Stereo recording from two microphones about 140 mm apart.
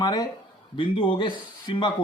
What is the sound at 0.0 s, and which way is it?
Speech, 30° left (ahead or behind).